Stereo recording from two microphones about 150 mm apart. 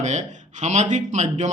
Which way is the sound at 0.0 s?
55° right (ahead or behind).